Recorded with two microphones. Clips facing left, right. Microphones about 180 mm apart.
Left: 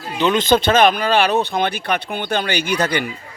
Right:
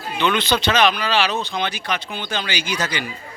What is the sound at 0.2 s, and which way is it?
A man's voice, 40° left (ahead or behind).